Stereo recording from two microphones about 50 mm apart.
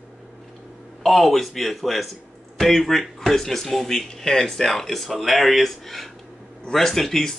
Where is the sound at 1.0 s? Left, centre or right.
Centre.